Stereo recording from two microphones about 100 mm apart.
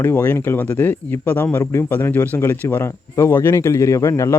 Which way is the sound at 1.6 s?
30° left (ahead or behind).